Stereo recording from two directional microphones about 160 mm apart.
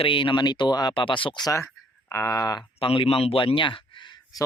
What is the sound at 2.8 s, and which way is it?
Speech, 35° left (ahead or behind).